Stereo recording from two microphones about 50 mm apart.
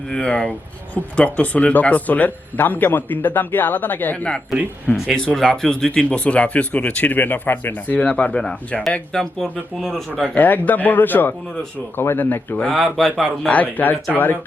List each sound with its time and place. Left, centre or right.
0.1 s speech: centre; by 4.3 s left
5.1 s speech: centre; by 8.4 s left
8.4 s speech: centre
9.4 s speech: centre
10.3 s speech: left
12.7 s speech: centre
13.5 s speech: left